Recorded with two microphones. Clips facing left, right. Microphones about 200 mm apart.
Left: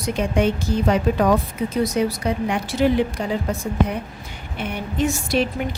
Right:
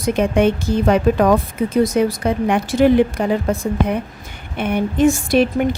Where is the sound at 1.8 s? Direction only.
50° right (ahead or behind).